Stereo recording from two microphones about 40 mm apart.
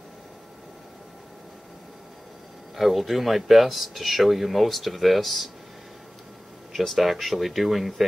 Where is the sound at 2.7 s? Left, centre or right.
Centre.